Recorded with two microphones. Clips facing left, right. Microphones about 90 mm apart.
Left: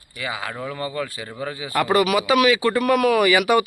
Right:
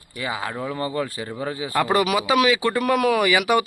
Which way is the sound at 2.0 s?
20° right (ahead or behind).